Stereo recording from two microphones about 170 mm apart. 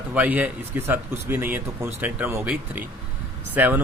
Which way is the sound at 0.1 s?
10° right (ahead or behind).